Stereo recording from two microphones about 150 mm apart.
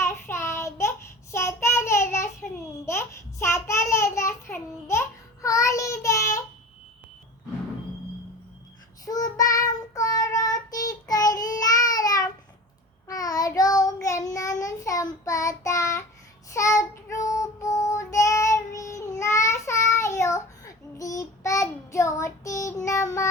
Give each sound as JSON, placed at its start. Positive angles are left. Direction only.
{"t": 0.0, "sound": "child singing", "side_deg": 15}
{"t": 9.0, "sound": "child singing", "side_deg": 25}